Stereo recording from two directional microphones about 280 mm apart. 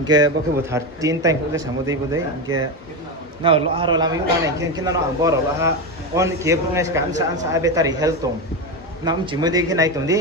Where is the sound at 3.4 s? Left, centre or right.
Centre.